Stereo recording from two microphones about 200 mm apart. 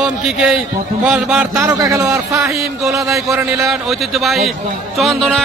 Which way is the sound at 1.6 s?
15° right (ahead or behind).